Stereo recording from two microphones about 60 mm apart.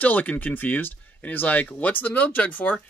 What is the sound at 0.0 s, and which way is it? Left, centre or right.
Speech, left.